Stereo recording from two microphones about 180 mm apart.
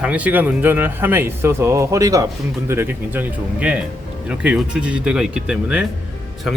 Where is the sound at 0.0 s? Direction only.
10° right (ahead or behind).